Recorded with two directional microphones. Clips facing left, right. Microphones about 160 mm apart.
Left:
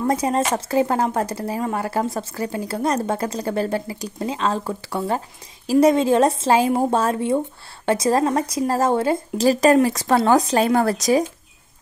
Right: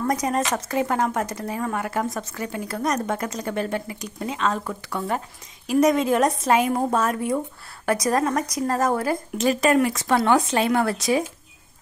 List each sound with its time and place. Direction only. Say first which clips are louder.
0.0 s a woman's voice: left 3 dB; 30° left (ahead or behind)